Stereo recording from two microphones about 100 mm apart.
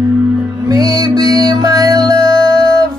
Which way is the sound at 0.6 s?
40° right (ahead or behind).